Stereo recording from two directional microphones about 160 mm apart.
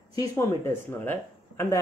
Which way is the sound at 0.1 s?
25° left (ahead or behind).